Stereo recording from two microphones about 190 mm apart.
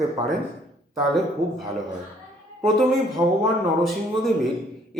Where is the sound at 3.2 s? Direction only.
20° right (ahead or behind).